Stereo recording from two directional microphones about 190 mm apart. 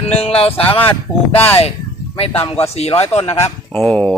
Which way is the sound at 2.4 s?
30° left (ahead or behind).